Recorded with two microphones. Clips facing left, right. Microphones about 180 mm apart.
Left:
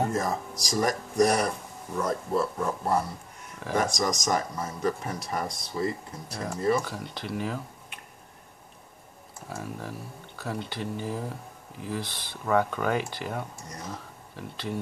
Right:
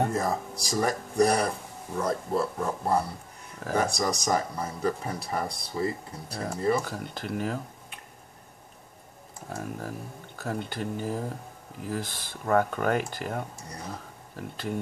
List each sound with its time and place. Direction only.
0.1 s speech: 35° right (ahead or behind)
9.5 s speech: 45° right (ahead or behind)
13.7 s speech: 35° right (ahead or behind)